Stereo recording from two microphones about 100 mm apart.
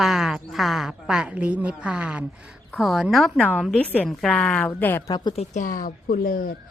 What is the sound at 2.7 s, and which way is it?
Speech, centre (ahead or behind).